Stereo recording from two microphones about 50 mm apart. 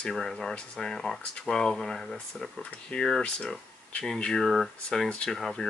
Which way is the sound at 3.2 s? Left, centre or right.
Centre.